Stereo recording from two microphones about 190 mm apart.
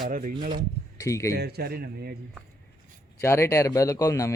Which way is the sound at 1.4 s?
55° right (ahead or behind).